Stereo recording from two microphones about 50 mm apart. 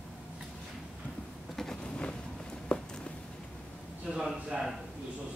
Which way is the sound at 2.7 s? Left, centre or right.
Centre.